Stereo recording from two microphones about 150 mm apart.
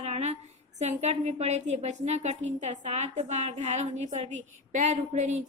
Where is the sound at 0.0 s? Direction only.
45° right (ahead or behind).